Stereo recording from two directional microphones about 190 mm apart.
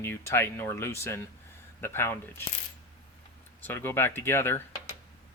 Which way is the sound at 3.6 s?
10° left (ahead or behind).